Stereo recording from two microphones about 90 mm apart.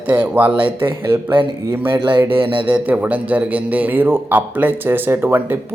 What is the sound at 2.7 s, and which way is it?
A man's voice, 20° right (ahead or behind).